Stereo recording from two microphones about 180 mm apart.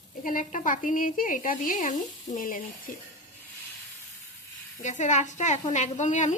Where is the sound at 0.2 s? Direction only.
50° left (ahead or behind).